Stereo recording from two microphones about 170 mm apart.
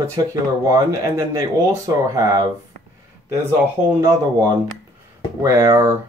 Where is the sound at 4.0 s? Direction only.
20° right (ahead or behind).